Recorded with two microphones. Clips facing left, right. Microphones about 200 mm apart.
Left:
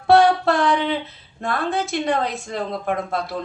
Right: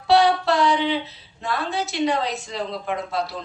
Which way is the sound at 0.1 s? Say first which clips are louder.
Left 3 dB; 50° left (ahead or behind).